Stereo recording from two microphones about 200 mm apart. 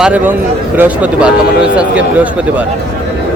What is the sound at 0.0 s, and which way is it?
Speech, 5° right (ahead or behind).